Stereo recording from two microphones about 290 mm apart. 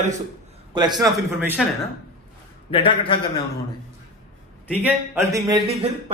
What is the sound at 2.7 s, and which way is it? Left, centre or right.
Speech, centre.